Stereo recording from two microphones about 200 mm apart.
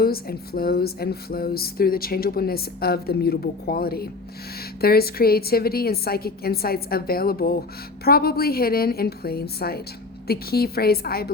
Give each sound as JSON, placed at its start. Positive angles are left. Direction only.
{"t": 0.0, "sound": "speech", "side_deg": 50}